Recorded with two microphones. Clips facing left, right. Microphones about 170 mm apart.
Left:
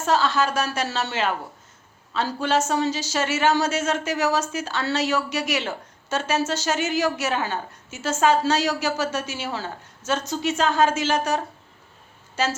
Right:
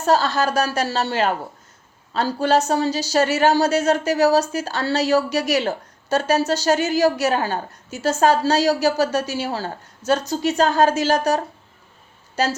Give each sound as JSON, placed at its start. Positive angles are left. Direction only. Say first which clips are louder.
{"t": 0.0, "sound": "a woman's voice", "louder": "right 3 dB", "side_deg": -40}